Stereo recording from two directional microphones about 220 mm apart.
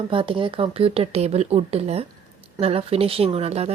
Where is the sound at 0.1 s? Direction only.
25° right (ahead or behind).